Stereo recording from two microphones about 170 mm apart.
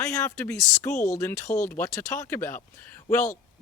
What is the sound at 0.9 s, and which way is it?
Speech, 45° left (ahead or behind).